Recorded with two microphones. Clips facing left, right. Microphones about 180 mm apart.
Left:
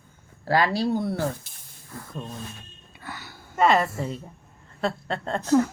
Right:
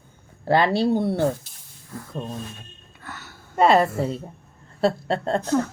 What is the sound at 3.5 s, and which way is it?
A woman's voice, 35° right (ahead or behind).